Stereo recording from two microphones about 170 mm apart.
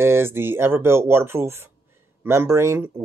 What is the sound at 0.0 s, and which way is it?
Speech, 15° right (ahead or behind).